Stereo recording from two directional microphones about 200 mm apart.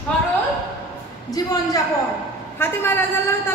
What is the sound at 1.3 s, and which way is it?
A woman's voice, 20° left (ahead or behind).